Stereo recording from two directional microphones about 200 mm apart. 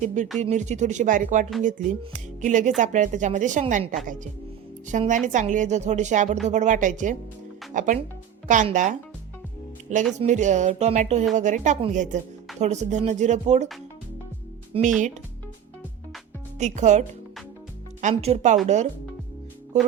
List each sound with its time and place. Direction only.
0.0 s a woman's voice: 40° right (ahead or behind)
10.2 s a woman's voice: 35° right (ahead or behind)
14.7 s speech: 40° right (ahead or behind)
16.6 s a woman's voice: 35° right (ahead or behind)
18.1 s a woman's voice: 30° right (ahead or behind)